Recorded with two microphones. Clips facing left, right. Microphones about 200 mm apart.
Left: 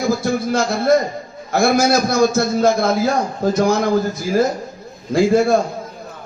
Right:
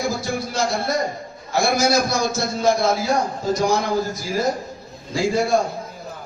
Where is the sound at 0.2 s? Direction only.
55° left (ahead or behind).